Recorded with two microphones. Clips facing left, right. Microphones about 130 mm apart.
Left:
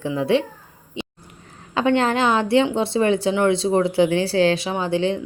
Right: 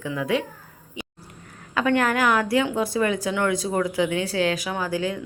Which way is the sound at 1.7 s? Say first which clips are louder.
Left 3 dB; 25° left (ahead or behind).